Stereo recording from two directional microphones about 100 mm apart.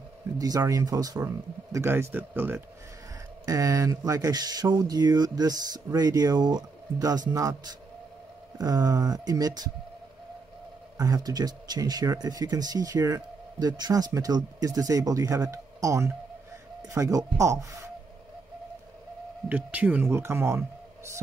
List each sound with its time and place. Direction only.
0.4 s speech: 35° right (ahead or behind)
3.4 s speech: 35° right (ahead or behind)
11.0 s speech: 40° right (ahead or behind)
19.5 s a man's voice: 15° right (ahead or behind)